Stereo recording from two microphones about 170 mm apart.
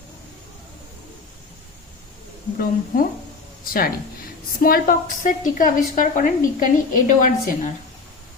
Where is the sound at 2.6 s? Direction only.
60° left (ahead or behind).